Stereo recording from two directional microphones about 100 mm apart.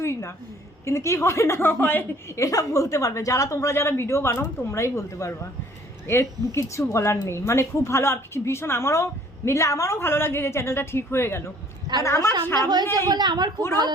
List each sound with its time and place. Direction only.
0.0 s a woman's voice: 25° left (ahead or behind)
2.4 s a woman's voice: 35° left (ahead or behind)
12.5 s a woman's voice: 45° right (ahead or behind)